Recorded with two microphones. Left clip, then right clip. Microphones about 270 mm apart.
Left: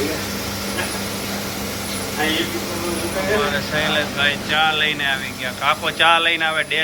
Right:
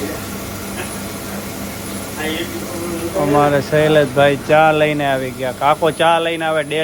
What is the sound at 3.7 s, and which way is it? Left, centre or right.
Speech, centre.